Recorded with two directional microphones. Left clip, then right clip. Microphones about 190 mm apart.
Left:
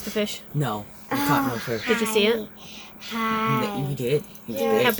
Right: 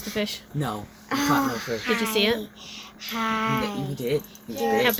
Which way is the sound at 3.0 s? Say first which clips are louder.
Left 1 dB; 35° right (ahead or behind).